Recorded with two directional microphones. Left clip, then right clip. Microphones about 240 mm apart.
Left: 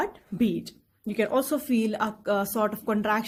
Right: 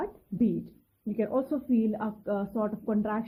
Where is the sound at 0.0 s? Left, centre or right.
Centre.